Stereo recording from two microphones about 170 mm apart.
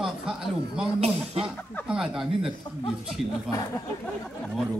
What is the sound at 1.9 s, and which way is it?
Speech, centre (ahead or behind).